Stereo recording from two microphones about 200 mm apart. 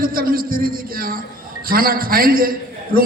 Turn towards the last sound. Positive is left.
turn(degrees=-45)  # may be behind; listen again after turning